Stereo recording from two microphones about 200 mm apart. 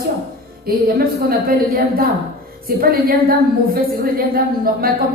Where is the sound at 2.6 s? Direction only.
50° right (ahead or behind).